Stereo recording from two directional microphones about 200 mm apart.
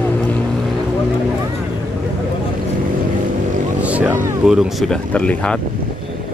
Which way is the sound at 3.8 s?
5° right (ahead or behind).